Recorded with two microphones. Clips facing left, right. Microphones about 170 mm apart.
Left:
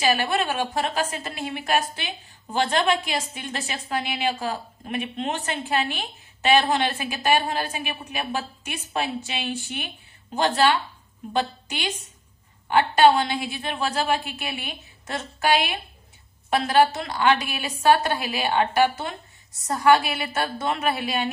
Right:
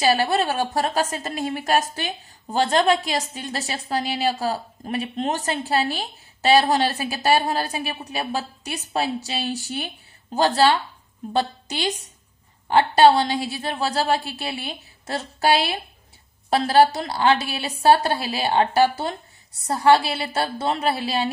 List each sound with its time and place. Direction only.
0.0 s a woman's voice: 35° right (ahead or behind)